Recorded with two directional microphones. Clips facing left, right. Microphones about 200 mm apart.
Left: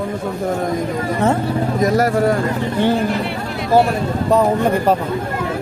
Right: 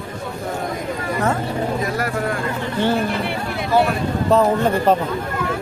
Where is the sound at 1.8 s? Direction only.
40° left (ahead or behind).